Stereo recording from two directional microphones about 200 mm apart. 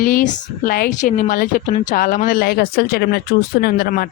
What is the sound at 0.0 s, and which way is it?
Speech, 45° left (ahead or behind).